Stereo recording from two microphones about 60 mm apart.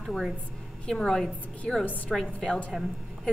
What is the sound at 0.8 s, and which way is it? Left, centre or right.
A woman's voice, centre.